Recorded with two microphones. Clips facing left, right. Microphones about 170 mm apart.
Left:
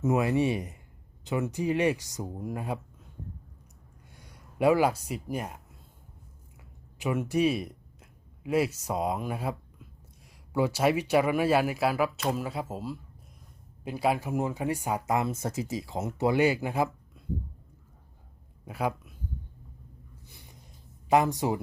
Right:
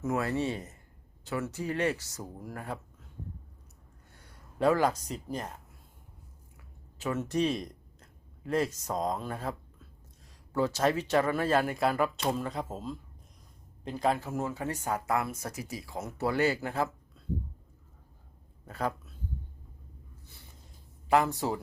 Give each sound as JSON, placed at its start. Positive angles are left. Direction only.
{"t": 0.0, "sound": "speech", "side_deg": 15}
{"t": 4.1, "sound": "speech", "side_deg": 15}
{"t": 7.0, "sound": "speech", "side_deg": 10}
{"t": 18.6, "sound": "speech", "side_deg": 10}
{"t": 20.2, "sound": "a sound", "side_deg": 15}
{"t": 21.1, "sound": "speech", "side_deg": 15}